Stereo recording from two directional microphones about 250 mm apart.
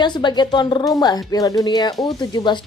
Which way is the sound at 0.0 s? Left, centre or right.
Centre.